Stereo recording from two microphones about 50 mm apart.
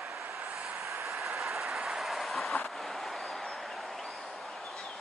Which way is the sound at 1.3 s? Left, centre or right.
Centre.